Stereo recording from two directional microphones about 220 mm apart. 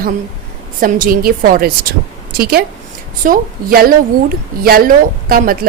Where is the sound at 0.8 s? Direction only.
40° right (ahead or behind).